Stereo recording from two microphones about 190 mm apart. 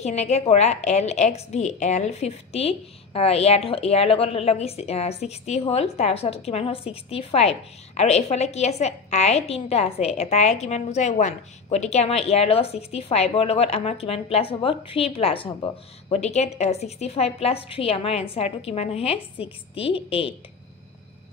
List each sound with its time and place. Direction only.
0.0 s a woman's voice: 35° left (ahead or behind)